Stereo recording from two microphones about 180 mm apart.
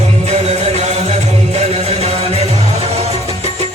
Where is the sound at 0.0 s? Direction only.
35° right (ahead or behind).